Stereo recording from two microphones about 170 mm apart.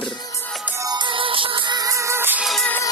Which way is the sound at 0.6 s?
20° right (ahead or behind).